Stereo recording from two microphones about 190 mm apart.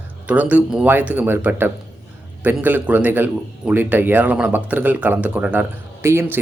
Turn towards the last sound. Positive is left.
turn(degrees=-15)  # may be behind; listen again after turning